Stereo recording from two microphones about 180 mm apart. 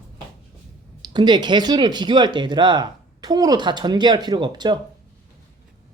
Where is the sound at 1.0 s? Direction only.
25° right (ahead or behind).